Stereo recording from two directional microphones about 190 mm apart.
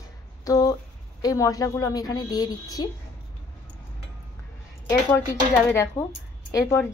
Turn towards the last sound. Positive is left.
turn(degrees=15)  # may be behind; listen again after turning